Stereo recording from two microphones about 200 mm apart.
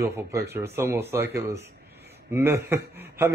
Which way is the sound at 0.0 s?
15° right (ahead or behind).